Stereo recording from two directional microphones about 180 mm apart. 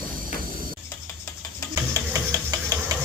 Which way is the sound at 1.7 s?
15° right (ahead or behind).